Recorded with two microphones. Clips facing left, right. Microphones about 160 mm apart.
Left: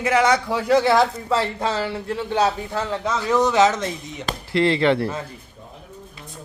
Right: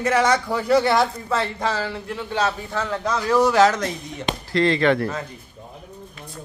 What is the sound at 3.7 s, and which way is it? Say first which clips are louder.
Speech: even; 20° left (ahead or behind).